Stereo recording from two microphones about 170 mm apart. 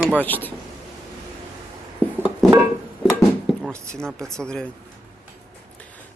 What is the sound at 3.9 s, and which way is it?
Speech, 5° left (ahead or behind).